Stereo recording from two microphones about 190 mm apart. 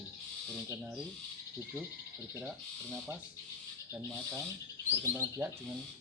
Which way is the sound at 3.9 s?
10° right (ahead or behind).